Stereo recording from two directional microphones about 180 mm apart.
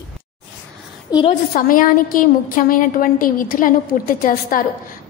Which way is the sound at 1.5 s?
55° left (ahead or behind).